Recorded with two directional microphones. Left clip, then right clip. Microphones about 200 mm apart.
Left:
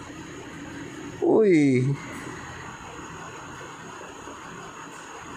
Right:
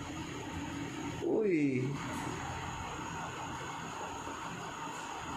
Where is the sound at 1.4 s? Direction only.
50° left (ahead or behind).